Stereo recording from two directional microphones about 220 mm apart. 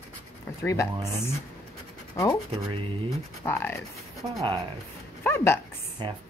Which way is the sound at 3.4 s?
10° left (ahead or behind).